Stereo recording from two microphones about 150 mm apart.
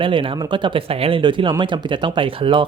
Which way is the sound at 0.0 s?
35° right (ahead or behind).